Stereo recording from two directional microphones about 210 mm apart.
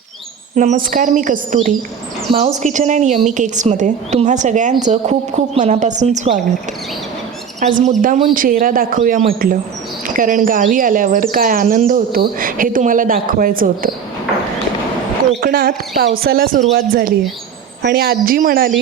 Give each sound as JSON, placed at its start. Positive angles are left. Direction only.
{"t": 0.5, "sound": "speech", "side_deg": -35}
{"t": 7.6, "sound": "speech", "side_deg": -35}
{"t": 15.4, "sound": "speech", "side_deg": -45}